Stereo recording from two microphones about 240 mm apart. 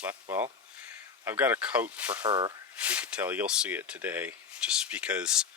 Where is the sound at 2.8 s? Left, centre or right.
Centre.